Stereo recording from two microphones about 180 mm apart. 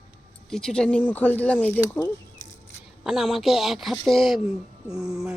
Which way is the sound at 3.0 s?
Centre (ahead or behind).